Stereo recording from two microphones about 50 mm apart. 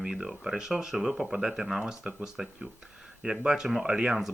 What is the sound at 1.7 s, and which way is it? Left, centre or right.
Speech, right.